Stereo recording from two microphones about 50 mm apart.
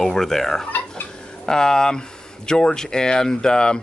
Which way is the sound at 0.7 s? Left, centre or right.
Left.